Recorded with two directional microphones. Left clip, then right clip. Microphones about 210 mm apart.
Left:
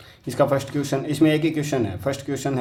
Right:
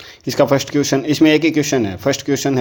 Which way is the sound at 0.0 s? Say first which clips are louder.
Right 5 dB; 35° right (ahead or behind).